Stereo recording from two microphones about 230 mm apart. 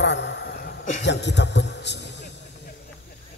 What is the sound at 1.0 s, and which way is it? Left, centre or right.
A man's voice, left.